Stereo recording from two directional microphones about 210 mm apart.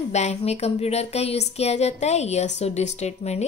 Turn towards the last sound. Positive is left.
turn(degrees=30)  # may be behind; listen again after turning